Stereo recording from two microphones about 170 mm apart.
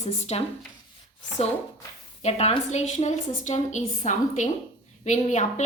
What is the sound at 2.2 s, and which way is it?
A woman's voice, 40° left (ahead or behind).